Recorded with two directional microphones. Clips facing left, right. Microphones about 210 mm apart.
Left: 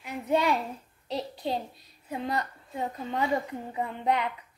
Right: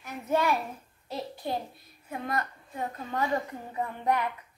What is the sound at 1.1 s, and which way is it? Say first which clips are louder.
A child's voice: left 2 dB; 20° left (ahead or behind).